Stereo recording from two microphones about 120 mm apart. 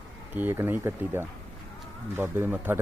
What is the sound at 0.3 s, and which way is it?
Speech, 15° right (ahead or behind).